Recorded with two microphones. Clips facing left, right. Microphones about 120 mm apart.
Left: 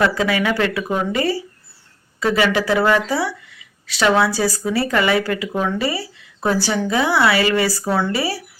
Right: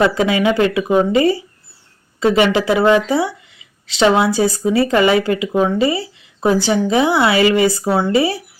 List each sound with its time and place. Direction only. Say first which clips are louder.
0.0 s speech: right 4 dB; 20° right (ahead or behind)